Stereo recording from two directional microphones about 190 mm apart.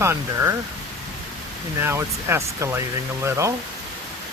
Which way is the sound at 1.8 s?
15° right (ahead or behind).